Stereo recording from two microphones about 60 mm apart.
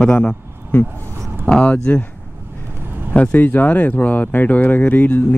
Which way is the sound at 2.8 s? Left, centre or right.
Right.